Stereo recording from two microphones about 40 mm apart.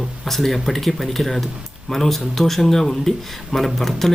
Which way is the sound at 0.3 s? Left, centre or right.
Centre.